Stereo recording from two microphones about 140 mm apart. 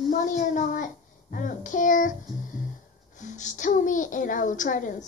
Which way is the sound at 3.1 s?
60° left (ahead or behind).